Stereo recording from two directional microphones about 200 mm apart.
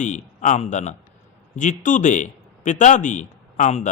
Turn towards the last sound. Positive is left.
turn(degrees=35)  # may be behind; listen again after turning